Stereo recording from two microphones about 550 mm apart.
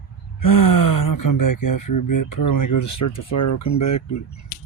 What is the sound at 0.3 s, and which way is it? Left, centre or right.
Speech, left.